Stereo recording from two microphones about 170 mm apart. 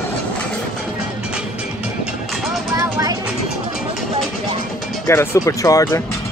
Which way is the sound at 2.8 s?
20° right (ahead or behind).